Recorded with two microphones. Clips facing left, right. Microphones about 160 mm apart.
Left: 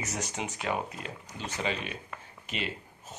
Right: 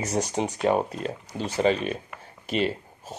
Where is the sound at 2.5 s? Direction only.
35° right (ahead or behind).